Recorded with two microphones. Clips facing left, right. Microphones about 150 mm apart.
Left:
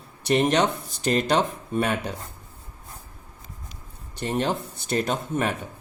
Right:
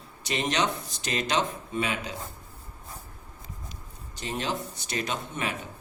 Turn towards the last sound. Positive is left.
turn(degrees=50)  # may be behind; listen again after turning